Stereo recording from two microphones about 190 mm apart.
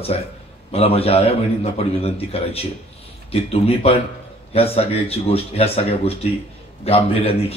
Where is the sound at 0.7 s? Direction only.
30° left (ahead or behind).